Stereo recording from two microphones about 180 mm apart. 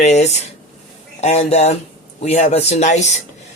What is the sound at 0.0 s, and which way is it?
Speech, 40° left (ahead or behind).